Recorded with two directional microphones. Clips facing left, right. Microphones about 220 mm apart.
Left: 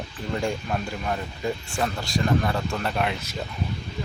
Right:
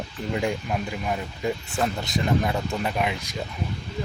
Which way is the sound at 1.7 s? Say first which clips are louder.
Right 1 dB; 20° right (ahead or behind).